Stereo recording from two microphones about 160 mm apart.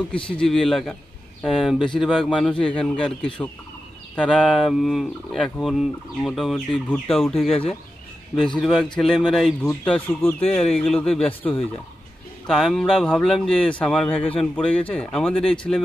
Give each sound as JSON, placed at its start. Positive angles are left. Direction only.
{"t": 0.1, "sound": "speech", "side_deg": 5}
{"t": 4.1, "sound": "speech", "side_deg": 5}
{"t": 14.1, "sound": "speech", "side_deg": 35}
{"t": 14.5, "sound": "speech", "side_deg": 10}